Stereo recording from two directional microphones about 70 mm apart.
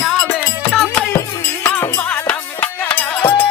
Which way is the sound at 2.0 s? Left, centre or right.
Centre.